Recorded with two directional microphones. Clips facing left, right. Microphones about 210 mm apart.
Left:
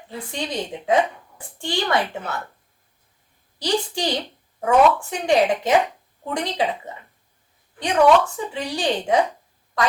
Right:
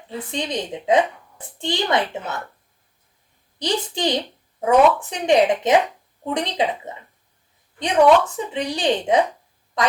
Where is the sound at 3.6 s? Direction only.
20° right (ahead or behind).